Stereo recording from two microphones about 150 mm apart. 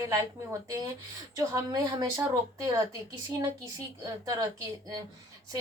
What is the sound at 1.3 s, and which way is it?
Speech, 20° right (ahead or behind).